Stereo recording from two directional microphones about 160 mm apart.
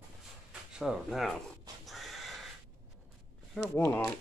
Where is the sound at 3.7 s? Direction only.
15° left (ahead or behind).